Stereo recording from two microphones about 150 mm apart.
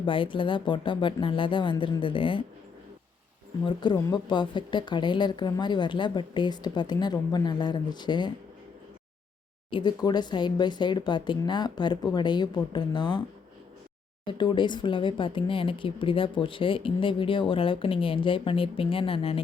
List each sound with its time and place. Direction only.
0.0 s speech: 35° left (ahead or behind)
3.6 s speech: 30° left (ahead or behind)
9.6 s speech: 30° left (ahead or behind)
14.3 s speech: 30° left (ahead or behind)